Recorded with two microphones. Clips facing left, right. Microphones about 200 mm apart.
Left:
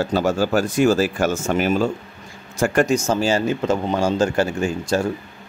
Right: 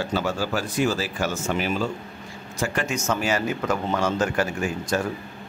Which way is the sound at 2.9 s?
30° left (ahead or behind).